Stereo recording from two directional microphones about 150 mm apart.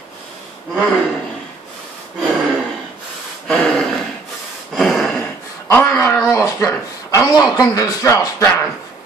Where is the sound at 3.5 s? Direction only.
5° left (ahead or behind).